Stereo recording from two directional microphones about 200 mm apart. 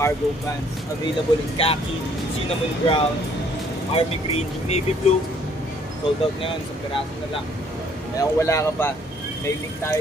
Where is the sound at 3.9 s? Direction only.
25° left (ahead or behind).